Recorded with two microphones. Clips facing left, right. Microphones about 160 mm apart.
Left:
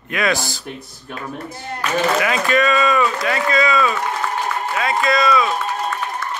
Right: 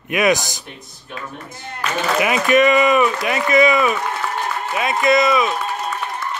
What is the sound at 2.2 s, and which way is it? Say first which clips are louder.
Speech: right 3 dB; 20° right (ahead or behind).